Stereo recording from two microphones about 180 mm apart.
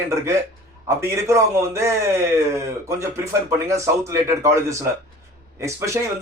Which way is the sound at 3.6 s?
15° right (ahead or behind).